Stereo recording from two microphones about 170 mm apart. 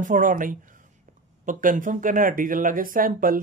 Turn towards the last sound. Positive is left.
turn(degrees=-55)  # may be behind; listen again after turning